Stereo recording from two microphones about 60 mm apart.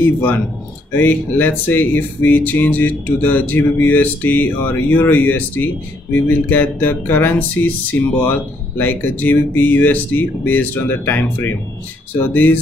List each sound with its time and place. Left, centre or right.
0.0 s speech: left